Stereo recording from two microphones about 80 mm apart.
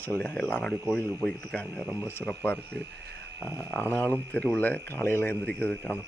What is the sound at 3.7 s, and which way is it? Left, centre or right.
Speech, left.